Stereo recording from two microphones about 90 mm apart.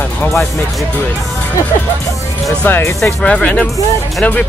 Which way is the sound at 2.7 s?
25° left (ahead or behind).